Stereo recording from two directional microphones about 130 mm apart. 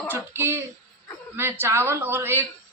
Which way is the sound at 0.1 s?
15° right (ahead or behind).